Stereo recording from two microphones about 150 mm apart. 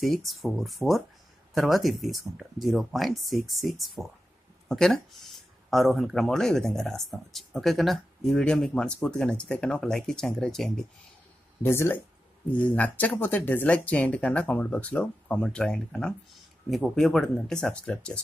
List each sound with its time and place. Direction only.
0.0 s speech: centre (ahead or behind)
11.6 s speech: 15° left (ahead or behind)